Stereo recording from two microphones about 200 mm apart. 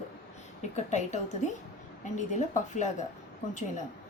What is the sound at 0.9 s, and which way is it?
A woman's voice, 35° left (ahead or behind).